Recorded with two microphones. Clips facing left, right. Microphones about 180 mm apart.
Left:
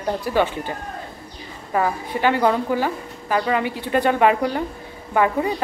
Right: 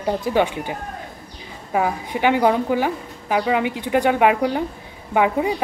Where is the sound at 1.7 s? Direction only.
15° right (ahead or behind).